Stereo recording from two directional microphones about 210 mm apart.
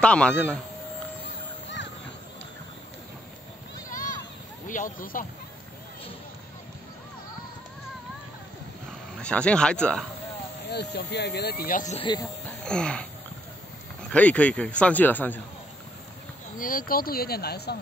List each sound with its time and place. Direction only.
0.0 s speech: 5° left (ahead or behind)
3.9 s a sound: 40° left (ahead or behind)
4.6 s speech: 40° left (ahead or behind)
9.2 s speech: 5° left (ahead or behind)
10.7 s speech: 50° left (ahead or behind); by 12.3 s 25° left (ahead or behind)
12.6 s wheeze: 5° left (ahead or behind)
14.1 s speech: 5° left (ahead or behind)
16.5 s speech: 40° left (ahead or behind)